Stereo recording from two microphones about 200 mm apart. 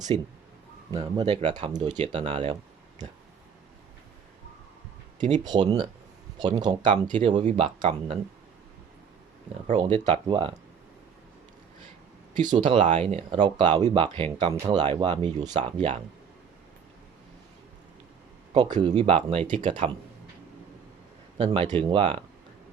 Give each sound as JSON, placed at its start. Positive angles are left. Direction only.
{"t": 0.1, "sound": "speech", "side_deg": -25}
{"t": 5.5, "sound": "speech", "side_deg": -20}
{"t": 9.9, "sound": "speech", "side_deg": -35}
{"t": 10.2, "sound": "speech", "side_deg": -20}
{"t": 12.5, "sound": "speech", "side_deg": -20}
{"t": 18.5, "sound": "speech", "side_deg": -20}
{"t": 21.3, "sound": "speech", "side_deg": -25}